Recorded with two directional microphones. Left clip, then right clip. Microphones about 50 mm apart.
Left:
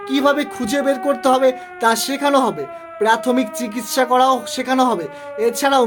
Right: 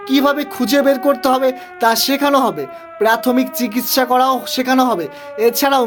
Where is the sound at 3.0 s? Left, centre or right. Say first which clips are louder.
Right 2 dB; right.